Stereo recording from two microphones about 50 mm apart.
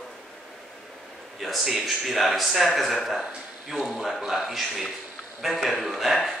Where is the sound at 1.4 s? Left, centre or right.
Centre.